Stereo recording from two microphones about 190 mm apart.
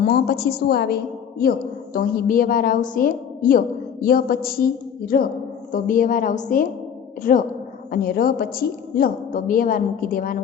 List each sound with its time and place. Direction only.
0.0 s a woman's voice: 55° left (ahead or behind)